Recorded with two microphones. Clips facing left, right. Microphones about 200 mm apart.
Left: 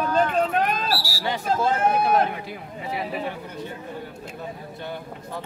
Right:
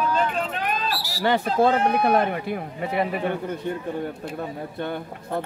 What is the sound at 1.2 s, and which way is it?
Speech, 60° right (ahead or behind).